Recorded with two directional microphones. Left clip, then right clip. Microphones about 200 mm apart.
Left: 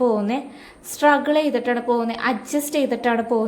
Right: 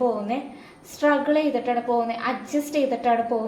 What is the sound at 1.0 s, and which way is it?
A woman's voice, 45° left (ahead or behind).